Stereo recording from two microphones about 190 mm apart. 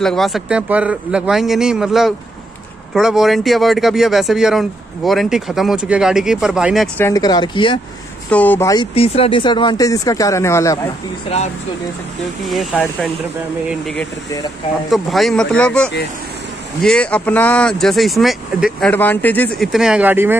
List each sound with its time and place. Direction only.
0.0 s speech: centre (ahead or behind)
7.0 s speech: 15° left (ahead or behind)
8.3 s speech: 10° left (ahead or behind)
8.9 s speech: 30° left (ahead or behind); by 10.9 s 15° left (ahead or behind)
11.2 s speech: 35° left (ahead or behind)
12.5 s speech: 5° left (ahead or behind); by 20.3 s 10° right (ahead or behind)